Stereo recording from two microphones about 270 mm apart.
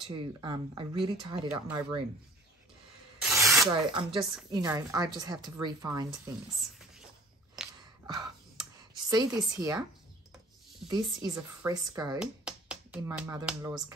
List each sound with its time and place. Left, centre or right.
0.1 s a woman's voice: centre
3.5 s a woman's voice: centre
7.6 s gasp: centre
8.1 s a sound: centre
9.6 s a woman's voice: centre
10.9 s a woman's voice: centre
12.2 s speech: centre